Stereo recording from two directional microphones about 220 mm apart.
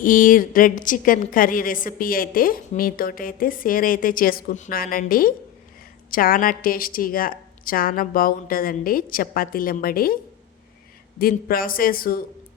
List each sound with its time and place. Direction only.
0.0 s a woman's voice: 40° left (ahead or behind)
11.2 s a woman's voice: 40° left (ahead or behind)